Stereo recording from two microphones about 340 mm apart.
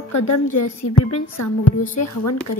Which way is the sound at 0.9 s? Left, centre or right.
Left.